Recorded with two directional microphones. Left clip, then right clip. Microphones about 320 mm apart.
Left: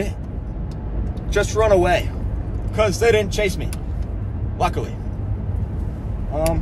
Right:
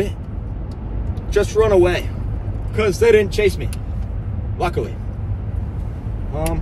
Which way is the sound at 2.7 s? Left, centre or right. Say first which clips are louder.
Right 3 dB; centre.